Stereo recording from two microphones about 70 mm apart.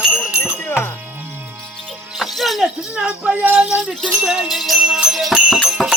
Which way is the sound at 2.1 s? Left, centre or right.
Centre.